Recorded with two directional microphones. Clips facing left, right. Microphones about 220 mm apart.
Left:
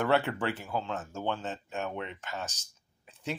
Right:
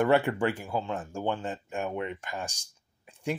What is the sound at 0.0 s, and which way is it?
Speech, 10° right (ahead or behind).